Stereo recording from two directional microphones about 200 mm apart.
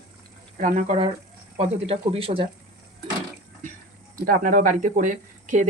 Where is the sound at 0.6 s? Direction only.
40° right (ahead or behind).